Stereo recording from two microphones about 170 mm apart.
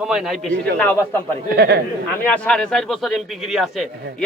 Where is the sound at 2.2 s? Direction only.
5° left (ahead or behind).